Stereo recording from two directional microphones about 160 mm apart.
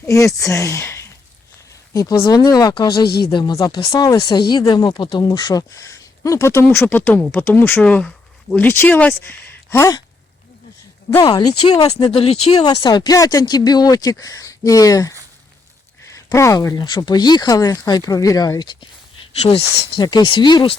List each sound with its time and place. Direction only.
0.1 s speech: 20° left (ahead or behind)
11.2 s speech: 25° left (ahead or behind)
12.1 s speech: 35° left (ahead or behind)
12.6 s speech: 30° left (ahead or behind)
16.1 s speech: 20° left (ahead or behind)